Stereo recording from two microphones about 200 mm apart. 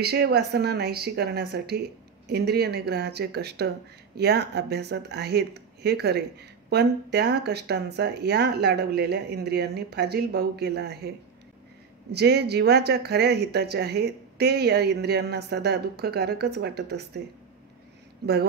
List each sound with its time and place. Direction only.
0.0 s speech: 55° right (ahead or behind)
12.1 s speech: 55° right (ahead or behind)
18.2 s speech: 55° right (ahead or behind)